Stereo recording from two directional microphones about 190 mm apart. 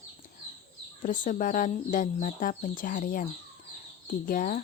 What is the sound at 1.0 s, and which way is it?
Speech, 45° left (ahead or behind).